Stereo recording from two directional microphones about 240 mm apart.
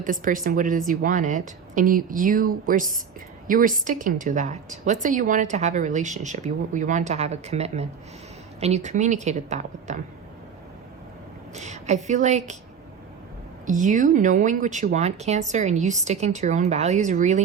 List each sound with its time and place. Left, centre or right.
0.0 s a woman's voice: right
11.5 s a woman's voice: right
13.7 s a woman's voice: right